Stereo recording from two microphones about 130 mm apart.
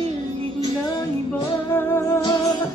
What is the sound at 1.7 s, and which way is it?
Music, 20° left (ahead or behind).